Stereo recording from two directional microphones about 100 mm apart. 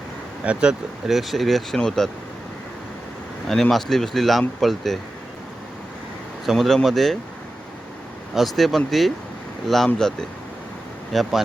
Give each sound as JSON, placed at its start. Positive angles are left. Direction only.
{"t": 0.4, "sound": "speech", "side_deg": -10}
{"t": 3.5, "sound": "speech", "side_deg": 5}
{"t": 6.4, "sound": "speech", "side_deg": 0}
{"t": 8.4, "sound": "speech", "side_deg": 0}